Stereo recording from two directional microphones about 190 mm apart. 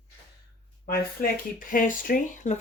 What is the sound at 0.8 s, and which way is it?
Speech, 50° left (ahead or behind).